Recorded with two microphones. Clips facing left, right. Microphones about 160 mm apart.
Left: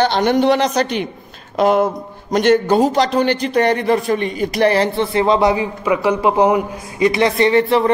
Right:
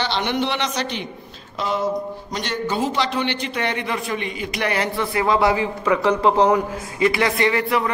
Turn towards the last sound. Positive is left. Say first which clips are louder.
# left 6 dB
turn(degrees=30)  # may be behind; listen again after turning